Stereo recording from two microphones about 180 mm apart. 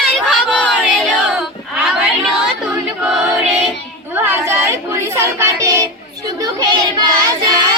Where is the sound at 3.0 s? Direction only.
5° right (ahead or behind).